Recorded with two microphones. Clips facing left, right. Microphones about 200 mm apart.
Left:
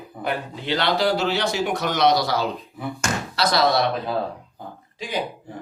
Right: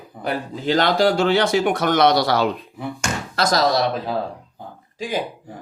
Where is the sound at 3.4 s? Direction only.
45° right (ahead or behind).